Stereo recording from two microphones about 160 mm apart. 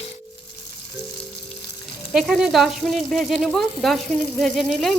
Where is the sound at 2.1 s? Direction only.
Centre (ahead or behind).